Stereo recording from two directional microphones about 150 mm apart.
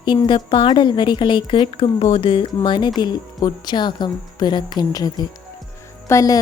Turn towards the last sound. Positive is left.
turn(degrees=20)  # may be behind; listen again after turning